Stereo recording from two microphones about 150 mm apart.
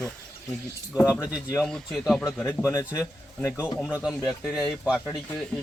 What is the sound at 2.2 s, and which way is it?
Speech, 15° left (ahead or behind).